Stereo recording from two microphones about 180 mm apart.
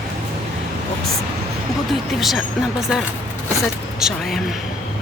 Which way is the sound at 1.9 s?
Centre (ahead or behind).